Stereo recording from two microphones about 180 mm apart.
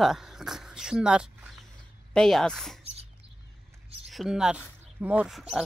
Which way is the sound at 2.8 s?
35° right (ahead or behind).